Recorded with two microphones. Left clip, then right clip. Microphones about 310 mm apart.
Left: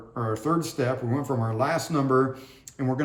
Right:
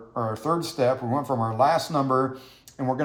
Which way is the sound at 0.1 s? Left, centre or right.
Centre.